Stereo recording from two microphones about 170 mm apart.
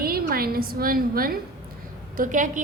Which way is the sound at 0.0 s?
60° right (ahead or behind).